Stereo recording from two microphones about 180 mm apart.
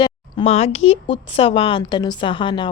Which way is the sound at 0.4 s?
35° left (ahead or behind).